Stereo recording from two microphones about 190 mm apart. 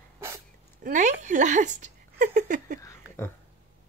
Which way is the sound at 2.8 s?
15° left (ahead or behind).